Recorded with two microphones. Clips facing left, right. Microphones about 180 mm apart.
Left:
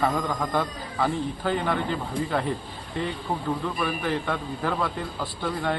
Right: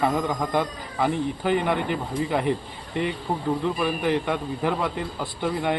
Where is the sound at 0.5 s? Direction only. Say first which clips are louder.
Right 2 dB; 15° right (ahead or behind).